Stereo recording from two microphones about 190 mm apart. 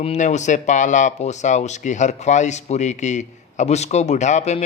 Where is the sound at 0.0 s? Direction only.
35° left (ahead or behind).